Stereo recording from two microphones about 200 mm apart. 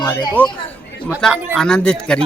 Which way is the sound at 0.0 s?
20° left (ahead or behind).